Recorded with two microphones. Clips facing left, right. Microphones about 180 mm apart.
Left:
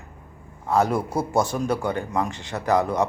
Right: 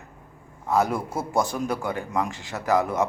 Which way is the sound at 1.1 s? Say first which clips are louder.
Left 2 dB; centre (ahead or behind).